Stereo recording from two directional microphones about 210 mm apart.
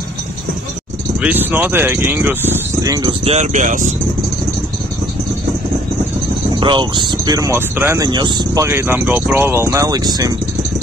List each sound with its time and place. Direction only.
1.2 s speech: 10° right (ahead or behind); by 3.9 s 35° right (ahead or behind)
6.6 s speech: 20° right (ahead or behind)